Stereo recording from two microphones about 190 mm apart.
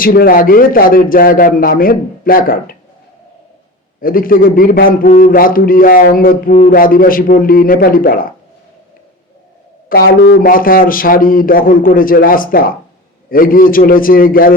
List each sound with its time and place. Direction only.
0.0 s a man's voice: 50° left (ahead or behind)
4.0 s a man's voice: 50° left (ahead or behind)
9.9 s a man's voice: 55° left (ahead or behind)